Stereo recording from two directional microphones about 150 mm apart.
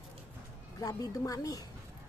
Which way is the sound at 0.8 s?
25° left (ahead or behind).